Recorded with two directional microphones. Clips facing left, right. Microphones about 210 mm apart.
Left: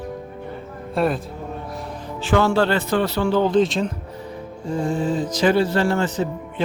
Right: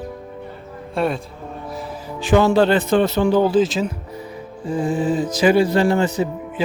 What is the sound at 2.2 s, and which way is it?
Speech, 15° right (ahead or behind).